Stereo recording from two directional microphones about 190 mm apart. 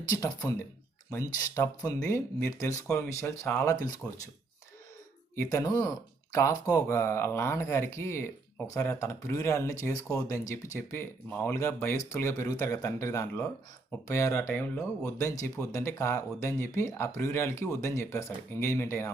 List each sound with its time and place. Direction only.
0.2 s speech: 20° left (ahead or behind)
5.4 s speech: 15° left (ahead or behind)